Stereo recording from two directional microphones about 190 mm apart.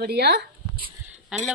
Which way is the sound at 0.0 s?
60° right (ahead or behind).